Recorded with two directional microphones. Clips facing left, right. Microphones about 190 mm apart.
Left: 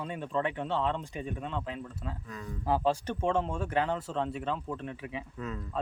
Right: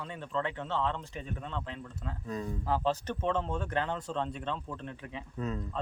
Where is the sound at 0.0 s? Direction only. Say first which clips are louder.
Left 3 dB; 15° left (ahead or behind).